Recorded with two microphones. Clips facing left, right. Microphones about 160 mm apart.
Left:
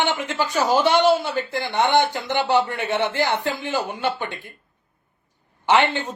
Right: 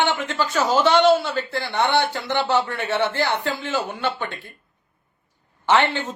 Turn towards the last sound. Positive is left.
turn(degrees=15)  # may be behind; listen again after turning